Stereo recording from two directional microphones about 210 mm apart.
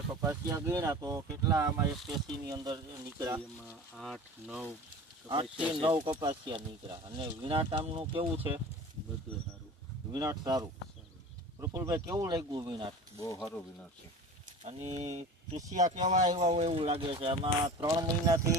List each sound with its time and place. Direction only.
0.1 s speech: 10° right (ahead or behind)
3.9 s speech: centre (ahead or behind); by 8.5 s 25° right (ahead or behind)
10.1 s speech: 20° right (ahead or behind)
13.1 s speech: 20° left (ahead or behind)
13.4 s speech: centre (ahead or behind)
14.6 s speech: 30° right (ahead or behind)